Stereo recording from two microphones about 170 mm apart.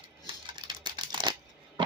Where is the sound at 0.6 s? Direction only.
25° right (ahead or behind).